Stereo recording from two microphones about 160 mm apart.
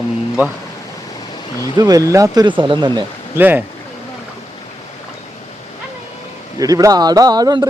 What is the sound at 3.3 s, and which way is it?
Speech, 10° right (ahead or behind).